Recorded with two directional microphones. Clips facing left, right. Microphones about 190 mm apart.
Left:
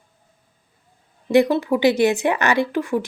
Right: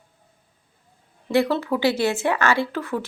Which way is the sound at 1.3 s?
15° left (ahead or behind).